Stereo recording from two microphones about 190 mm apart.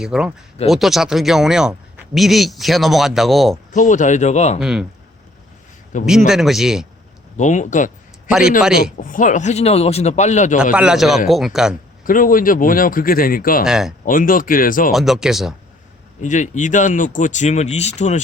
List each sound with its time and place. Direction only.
0.0 s speech: 5° right (ahead or behind)
3.7 s speech: 40° left (ahead or behind)
4.6 s speech: 5° right (ahead or behind)
6.1 s speech: 5° right (ahead or behind)
7.3 s speech: 40° left (ahead or behind)
8.3 s speech: 5° right (ahead or behind)
8.8 s speech: 45° left (ahead or behind)
10.6 s speech: 5° right (ahead or behind)
12.0 s speech: 45° left (ahead or behind)
13.7 s speech: 5° right (ahead or behind)
14.0 s speech: 45° left (ahead or behind)
14.9 s speech: centre (ahead or behind)
16.2 s speech: 40° left (ahead or behind)